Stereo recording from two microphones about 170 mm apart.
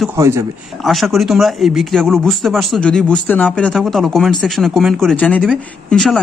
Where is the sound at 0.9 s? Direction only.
Centre (ahead or behind).